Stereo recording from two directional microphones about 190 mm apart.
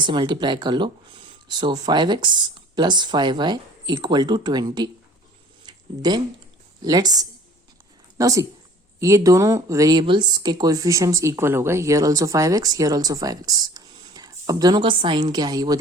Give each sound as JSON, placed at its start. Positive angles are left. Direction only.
{"t": 0.0, "sound": "speech", "side_deg": -25}
{"t": 5.6, "sound": "a sound", "side_deg": -20}
{"t": 6.8, "sound": "a woman's voice", "side_deg": -20}